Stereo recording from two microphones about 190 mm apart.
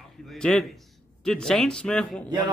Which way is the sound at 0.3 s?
5° left (ahead or behind).